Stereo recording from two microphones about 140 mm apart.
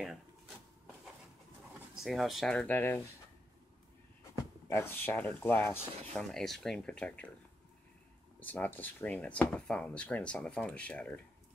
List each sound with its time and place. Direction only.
2.0 s speech: centre (ahead or behind)
4.6 s speech: 15° left (ahead or behind)
6.1 s speech: 5° left (ahead or behind)
8.4 s speech: 10° left (ahead or behind)